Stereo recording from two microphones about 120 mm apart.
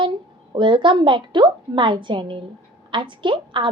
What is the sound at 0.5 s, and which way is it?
A woman's voice, 40° right (ahead or behind).